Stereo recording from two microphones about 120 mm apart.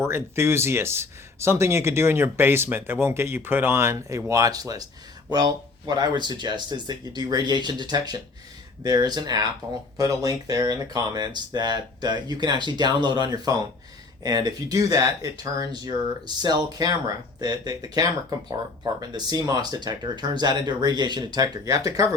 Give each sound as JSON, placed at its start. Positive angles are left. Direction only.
{"t": 0.0, "sound": "speech", "side_deg": -20}